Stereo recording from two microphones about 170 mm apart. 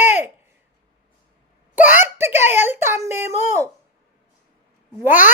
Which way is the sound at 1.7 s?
10° right (ahead or behind).